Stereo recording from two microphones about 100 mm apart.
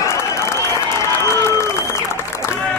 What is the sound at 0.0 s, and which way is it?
Applause, 30° left (ahead or behind).